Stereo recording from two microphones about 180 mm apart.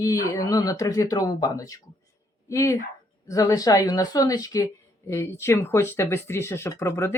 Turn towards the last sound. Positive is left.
turn(degrees=15)  # may be behind; listen again after turning